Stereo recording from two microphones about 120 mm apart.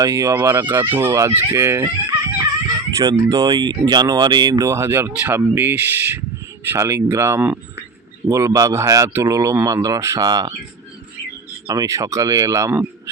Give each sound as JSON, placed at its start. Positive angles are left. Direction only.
{"t": 0.0, "sound": "speech", "side_deg": -30}
{"t": 11.7, "sound": "speech", "side_deg": -30}